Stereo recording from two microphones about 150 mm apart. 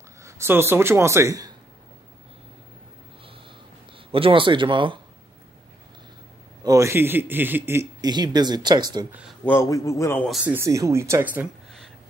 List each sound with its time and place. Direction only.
0.2 s a man's voice: 15° right (ahead or behind)
4.1 s speech: 35° right (ahead or behind)
6.6 s a man's voice: 20° right (ahead or behind)
8.1 s speech: 30° right (ahead or behind)
9.4 s a man's voice: 15° left (ahead or behind)
10.4 s a man's voice: 15° right (ahead or behind)